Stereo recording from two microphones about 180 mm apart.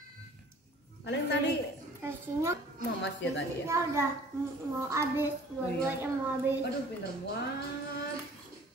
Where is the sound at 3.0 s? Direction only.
85° left.